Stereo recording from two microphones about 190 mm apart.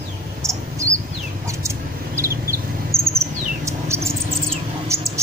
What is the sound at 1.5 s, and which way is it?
Mouse, 15° right (ahead or behind).